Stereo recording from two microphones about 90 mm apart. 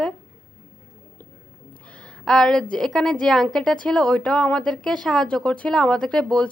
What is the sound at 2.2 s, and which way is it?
A woman's voice, 5° left (ahead or behind).